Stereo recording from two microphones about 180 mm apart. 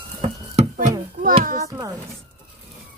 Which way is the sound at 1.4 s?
50° right (ahead or behind).